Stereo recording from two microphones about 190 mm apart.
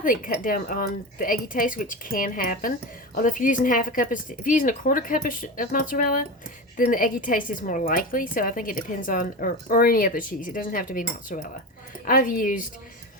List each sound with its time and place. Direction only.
0.0 s a woman's voice: 45° left (ahead or behind)